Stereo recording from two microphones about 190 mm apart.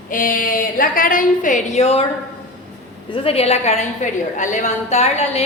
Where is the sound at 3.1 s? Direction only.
30° left (ahead or behind).